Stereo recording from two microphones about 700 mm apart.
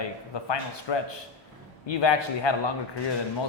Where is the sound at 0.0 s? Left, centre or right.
Left.